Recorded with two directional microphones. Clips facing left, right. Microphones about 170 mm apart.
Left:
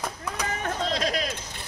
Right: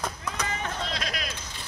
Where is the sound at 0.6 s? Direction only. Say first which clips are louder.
Left 5 dB; 40° left (ahead or behind).